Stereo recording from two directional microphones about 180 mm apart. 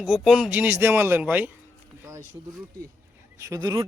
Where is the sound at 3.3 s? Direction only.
15° right (ahead or behind).